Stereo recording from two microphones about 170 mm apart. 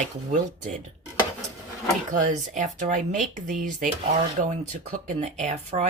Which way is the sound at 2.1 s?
45° right (ahead or behind).